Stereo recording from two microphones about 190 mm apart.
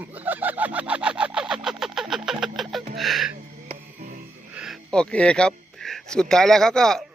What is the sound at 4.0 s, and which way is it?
Music, 45° right (ahead or behind).